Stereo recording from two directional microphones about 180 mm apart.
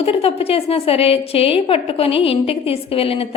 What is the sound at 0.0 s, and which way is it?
A woman's voice, 35° left (ahead or behind).